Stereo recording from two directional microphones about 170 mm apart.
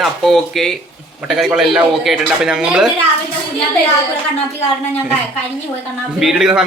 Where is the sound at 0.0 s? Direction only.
Centre (ahead or behind).